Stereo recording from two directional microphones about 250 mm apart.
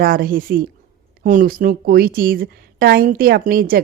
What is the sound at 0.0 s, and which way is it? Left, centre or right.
Speech, right.